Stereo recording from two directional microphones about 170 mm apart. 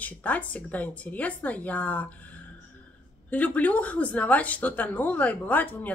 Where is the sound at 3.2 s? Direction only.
10° left (ahead or behind).